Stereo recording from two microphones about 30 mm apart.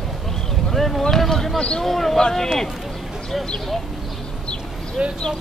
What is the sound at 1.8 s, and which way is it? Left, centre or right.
Speech, centre.